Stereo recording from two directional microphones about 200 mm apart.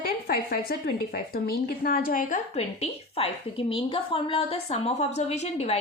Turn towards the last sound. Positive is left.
turn(degrees=30)  # may be behind; listen again after turning